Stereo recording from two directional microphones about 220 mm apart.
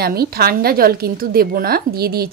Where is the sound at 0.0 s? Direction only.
45° right (ahead or behind).